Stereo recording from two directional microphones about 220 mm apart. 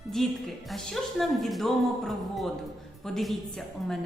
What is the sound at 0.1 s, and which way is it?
A woman's voice, centre (ahead or behind).